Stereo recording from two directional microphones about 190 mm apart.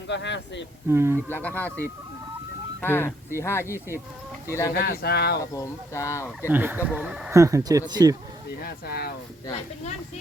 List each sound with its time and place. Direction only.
0.1 s speech: 65° left (ahead or behind)
0.9 s speech: 15° right (ahead or behind)
1.3 s speech: 10° left (ahead or behind)
2.8 s speech: 10° left (ahead or behind)
4.7 s speech: 55° left (ahead or behind)
5.5 s speech: 15° left (ahead or behind)
6.5 s speech: 10° right (ahead or behind)
8.6 s speech: 55° left (ahead or behind)